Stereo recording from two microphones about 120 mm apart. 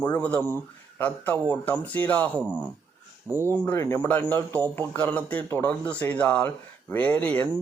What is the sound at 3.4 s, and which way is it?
Speech, 15° left (ahead or behind).